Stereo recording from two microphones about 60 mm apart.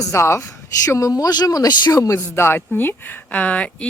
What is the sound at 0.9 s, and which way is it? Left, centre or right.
Speech, left.